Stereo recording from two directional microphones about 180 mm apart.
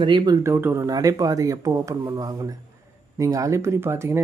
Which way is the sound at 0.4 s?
15° right (ahead or behind).